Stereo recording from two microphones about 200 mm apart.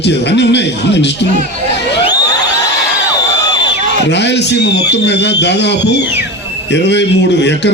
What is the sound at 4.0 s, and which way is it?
Speech, 60° left (ahead or behind).